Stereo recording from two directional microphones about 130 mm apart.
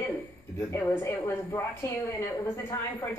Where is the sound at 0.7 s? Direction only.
20° left (ahead or behind).